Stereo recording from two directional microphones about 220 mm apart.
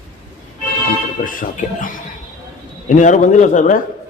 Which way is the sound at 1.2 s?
35° left (ahead or behind).